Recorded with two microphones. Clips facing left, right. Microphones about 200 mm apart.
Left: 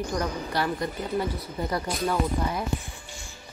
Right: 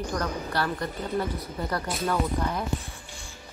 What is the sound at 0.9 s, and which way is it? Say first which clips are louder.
Speech: left 1 dB; centre (ahead or behind).